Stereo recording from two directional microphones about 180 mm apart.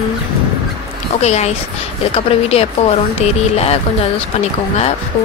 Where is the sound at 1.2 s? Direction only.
40° left (ahead or behind).